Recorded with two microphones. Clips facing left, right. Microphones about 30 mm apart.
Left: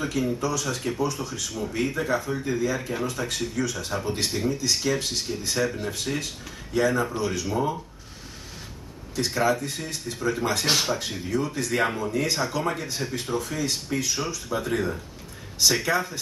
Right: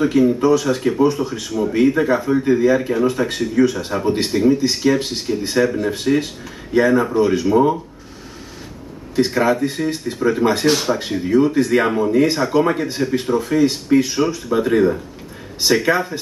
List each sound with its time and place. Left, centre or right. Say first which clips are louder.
0.2 s speech: right 12 dB; right
9.1 s speech: right 7 dB; right
10.9 s speech: right 10 dB; right; by 12.6 s centre
12.6 s speech: right 9 dB; right